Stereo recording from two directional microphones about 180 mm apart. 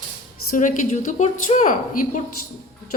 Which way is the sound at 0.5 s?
45° left (ahead or behind).